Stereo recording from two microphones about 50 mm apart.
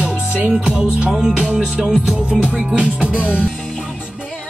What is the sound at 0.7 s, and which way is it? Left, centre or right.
Music, centre.